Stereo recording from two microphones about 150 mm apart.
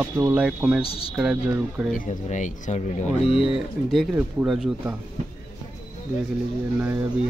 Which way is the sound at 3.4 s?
Centre (ahead or behind).